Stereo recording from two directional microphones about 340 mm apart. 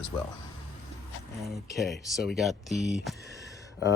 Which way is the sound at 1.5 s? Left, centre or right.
Centre.